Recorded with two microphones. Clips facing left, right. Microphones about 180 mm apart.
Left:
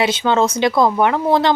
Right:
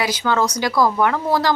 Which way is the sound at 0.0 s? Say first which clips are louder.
Left 4 dB; 25° left (ahead or behind).